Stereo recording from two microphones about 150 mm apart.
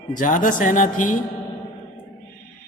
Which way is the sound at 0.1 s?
60° left (ahead or behind).